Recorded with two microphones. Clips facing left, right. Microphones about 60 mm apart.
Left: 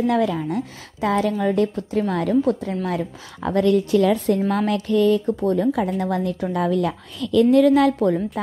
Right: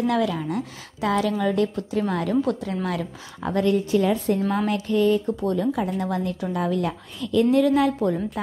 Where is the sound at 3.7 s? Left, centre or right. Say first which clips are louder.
Left 3 dB; left.